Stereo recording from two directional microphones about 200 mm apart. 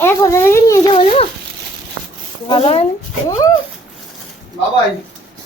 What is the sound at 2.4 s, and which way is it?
Speech, 25° left (ahead or behind).